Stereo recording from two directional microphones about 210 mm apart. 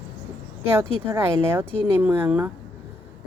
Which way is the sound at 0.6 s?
10° right (ahead or behind).